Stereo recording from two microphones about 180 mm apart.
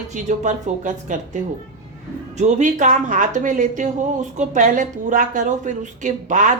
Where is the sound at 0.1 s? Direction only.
40° right (ahead or behind).